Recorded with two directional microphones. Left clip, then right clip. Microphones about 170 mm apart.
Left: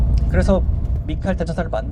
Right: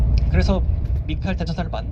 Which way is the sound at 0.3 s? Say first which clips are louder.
Left 5 dB; 70° left (ahead or behind).